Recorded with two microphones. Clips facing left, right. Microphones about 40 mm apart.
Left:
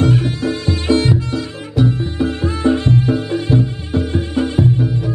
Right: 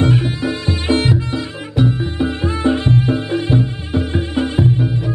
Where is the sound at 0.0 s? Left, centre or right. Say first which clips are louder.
Left 1 dB; centre.